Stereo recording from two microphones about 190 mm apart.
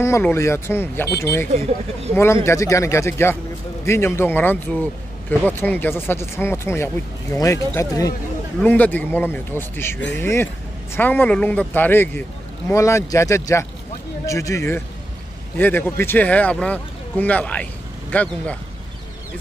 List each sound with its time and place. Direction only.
0.0 s a man's voice: 15° left (ahead or behind)